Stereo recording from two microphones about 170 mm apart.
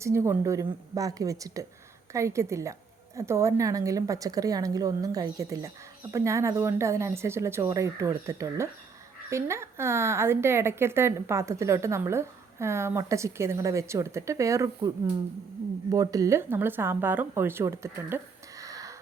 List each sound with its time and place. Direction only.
0.0 s a woman's voice: 15° right (ahead or behind)